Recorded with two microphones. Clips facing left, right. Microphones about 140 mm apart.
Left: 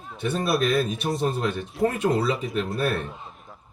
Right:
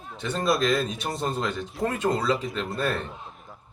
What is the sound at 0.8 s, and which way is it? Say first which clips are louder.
A man's voice: left 4 dB; 5° left (ahead or behind).